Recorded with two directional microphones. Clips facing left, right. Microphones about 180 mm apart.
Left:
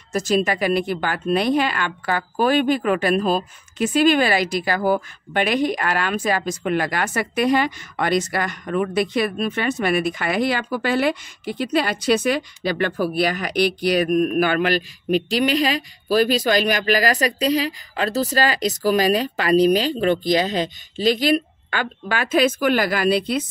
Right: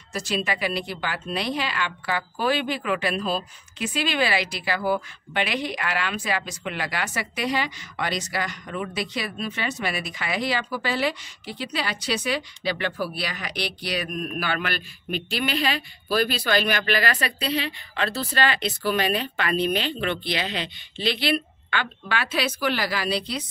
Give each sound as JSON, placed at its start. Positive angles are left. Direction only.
{"t": 0.1, "sound": "speech", "side_deg": 45}